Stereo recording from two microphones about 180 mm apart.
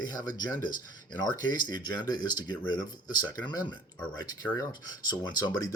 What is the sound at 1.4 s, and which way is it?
Speech, 25° left (ahead or behind).